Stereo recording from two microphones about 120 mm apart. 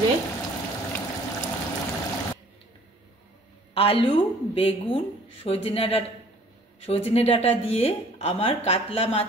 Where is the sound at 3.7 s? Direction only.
50° left (ahead or behind).